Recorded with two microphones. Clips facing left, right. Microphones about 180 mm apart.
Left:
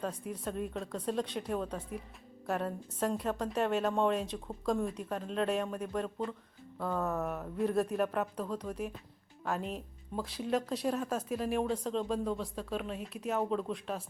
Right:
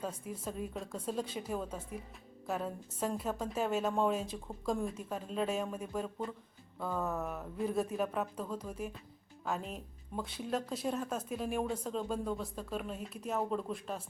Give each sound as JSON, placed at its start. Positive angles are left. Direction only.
{"t": 0.0, "sound": "speech", "side_deg": 0}